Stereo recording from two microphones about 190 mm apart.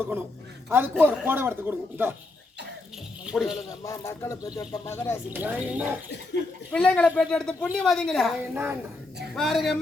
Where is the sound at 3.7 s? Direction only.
15° left (ahead or behind).